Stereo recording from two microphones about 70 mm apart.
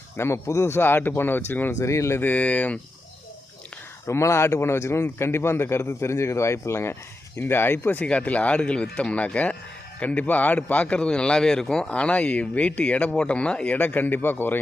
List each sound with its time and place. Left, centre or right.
0.2 s speech: left
0.8 s speech: left
1.8 s speech: left
2.2 s speech: left
4.0 s a man's voice: left